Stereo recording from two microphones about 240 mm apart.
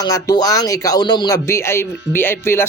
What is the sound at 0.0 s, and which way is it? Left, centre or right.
Speech, centre.